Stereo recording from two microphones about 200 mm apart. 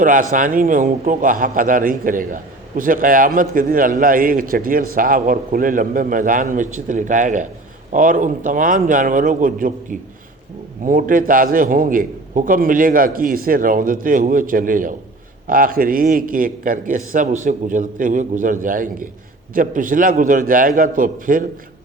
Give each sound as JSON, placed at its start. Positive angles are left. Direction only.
{"t": 0.0, "sound": "a man's voice", "side_deg": -40}